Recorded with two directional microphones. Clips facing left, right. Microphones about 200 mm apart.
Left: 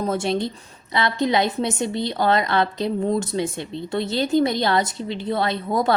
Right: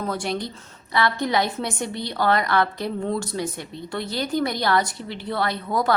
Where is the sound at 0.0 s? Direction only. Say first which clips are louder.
Left 4 dB; 25° left (ahead or behind).